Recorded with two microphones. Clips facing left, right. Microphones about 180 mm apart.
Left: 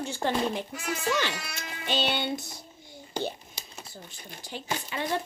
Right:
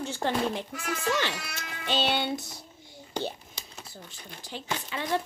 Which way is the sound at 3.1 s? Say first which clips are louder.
Left 1 dB; 10° left (ahead or behind).